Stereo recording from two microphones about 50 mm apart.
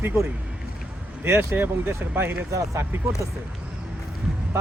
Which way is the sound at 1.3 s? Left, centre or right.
Right.